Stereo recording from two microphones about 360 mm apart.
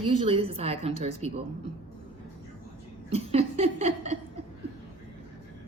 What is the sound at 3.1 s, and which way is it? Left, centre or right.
Laughter, centre.